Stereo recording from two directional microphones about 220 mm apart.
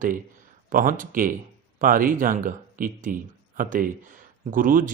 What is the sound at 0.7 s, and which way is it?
Speech, 40° right (ahead or behind).